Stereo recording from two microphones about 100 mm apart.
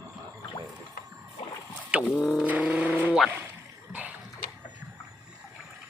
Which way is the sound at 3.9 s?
15° right (ahead or behind).